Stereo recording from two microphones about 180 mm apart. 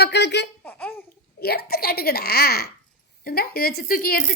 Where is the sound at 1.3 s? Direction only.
60° left (ahead or behind).